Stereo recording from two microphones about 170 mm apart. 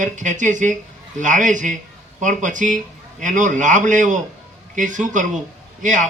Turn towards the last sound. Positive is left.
turn(degrees=-45)  # may be behind; listen again after turning